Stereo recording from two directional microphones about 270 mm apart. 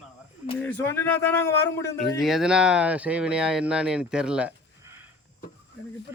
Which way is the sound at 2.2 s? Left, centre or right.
Centre.